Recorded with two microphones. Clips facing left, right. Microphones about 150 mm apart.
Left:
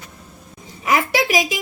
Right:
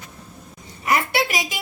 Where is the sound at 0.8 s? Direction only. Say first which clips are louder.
Left 3 dB; 90° left.